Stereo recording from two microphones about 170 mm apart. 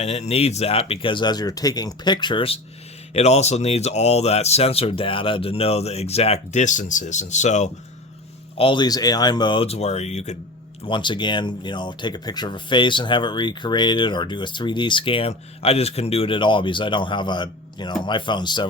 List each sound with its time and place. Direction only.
0.0 s speech: 40° left (ahead or behind)
8.5 s speech: 30° left (ahead or behind)
10.8 s speech: 30° left (ahead or behind)